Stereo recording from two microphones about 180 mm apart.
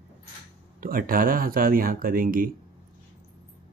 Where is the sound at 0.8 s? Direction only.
55° right (ahead or behind).